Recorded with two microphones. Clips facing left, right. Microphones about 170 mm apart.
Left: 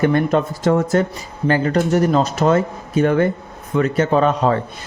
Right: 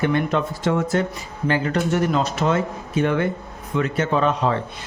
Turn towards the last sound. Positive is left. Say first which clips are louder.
# left 4 dB
turn(degrees=40)  # may be behind; listen again after turning